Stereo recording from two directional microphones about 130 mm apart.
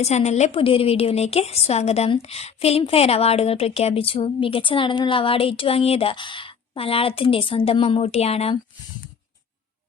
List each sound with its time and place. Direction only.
0.0 s a woman's voice: 60° left (ahead or behind)